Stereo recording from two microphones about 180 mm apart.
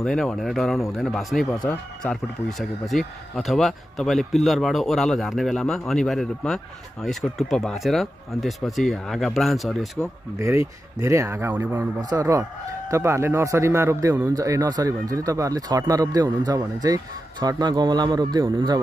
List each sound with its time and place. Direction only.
0.0 s speech: 5° left (ahead or behind)
11.0 s speech: 15° right (ahead or behind)